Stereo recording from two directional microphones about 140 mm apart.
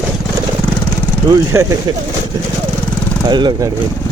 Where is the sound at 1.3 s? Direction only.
25° right (ahead or behind).